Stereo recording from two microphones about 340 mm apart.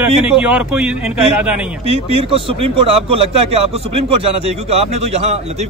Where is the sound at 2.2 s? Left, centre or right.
Centre.